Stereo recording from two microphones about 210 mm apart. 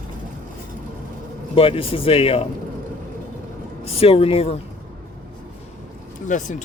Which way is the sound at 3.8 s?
30° left (ahead or behind).